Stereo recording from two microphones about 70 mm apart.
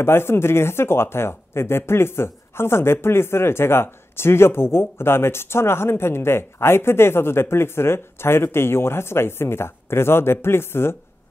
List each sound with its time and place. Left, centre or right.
0.0 s speech: left